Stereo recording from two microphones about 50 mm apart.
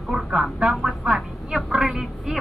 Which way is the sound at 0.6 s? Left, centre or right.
Right.